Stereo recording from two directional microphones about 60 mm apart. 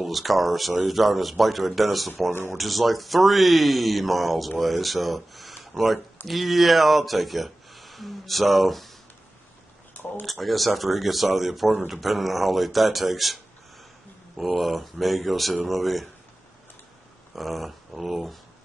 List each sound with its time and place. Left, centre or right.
0.0 s speech: centre
9.9 s a sound: left
10.2 s speech: centre
17.4 s speech: centre